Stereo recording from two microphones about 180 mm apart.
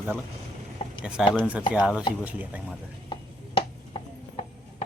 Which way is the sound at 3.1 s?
30° left (ahead or behind).